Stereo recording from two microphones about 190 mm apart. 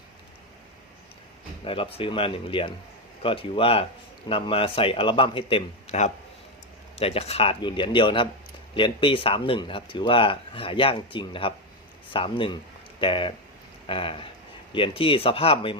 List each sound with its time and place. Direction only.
1.6 s speech: 30° left (ahead or behind)